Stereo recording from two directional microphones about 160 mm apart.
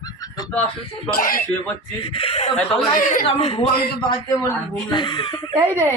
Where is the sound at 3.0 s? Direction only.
60° left (ahead or behind).